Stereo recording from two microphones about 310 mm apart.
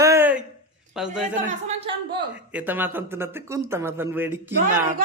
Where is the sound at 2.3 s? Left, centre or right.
Centre.